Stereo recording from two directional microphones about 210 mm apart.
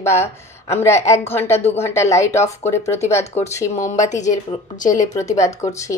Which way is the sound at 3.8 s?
35° left (ahead or behind).